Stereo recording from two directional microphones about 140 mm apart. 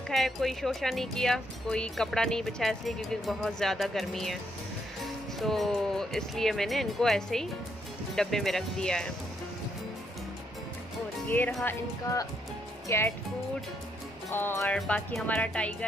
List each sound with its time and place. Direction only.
0.1 s speech: centre (ahead or behind)
11.2 s speech: 10° left (ahead or behind)
11.6 s speech: 25° left (ahead or behind)
14.3 s speech: 15° left (ahead or behind)